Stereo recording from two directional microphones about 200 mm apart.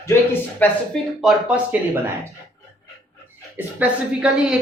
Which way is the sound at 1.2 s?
5° right (ahead or behind).